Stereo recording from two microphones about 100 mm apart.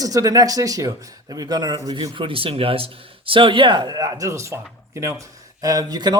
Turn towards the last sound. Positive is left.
turn(degrees=-40)  # may be behind; listen again after turning